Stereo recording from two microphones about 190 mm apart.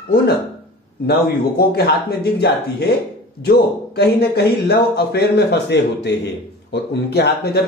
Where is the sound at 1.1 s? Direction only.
55° left (ahead or behind).